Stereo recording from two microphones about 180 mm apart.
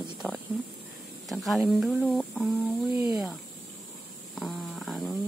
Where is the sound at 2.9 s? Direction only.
25° left (ahead or behind).